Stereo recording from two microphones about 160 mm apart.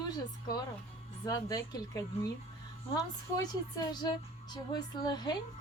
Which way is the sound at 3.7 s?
25° left (ahead or behind).